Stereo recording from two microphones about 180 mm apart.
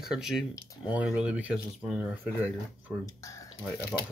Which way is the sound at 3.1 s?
20° left (ahead or behind).